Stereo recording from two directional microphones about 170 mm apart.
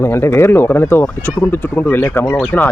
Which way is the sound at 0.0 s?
15° left (ahead or behind).